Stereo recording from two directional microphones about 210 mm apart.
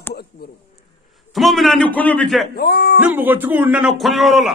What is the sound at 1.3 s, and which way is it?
A man's voice, centre (ahead or behind).